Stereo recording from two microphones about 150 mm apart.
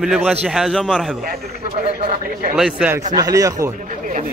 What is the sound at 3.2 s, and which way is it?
Speech, 20° right (ahead or behind).